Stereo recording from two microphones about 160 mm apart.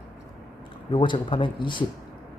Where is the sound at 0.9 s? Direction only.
30° left (ahead or behind).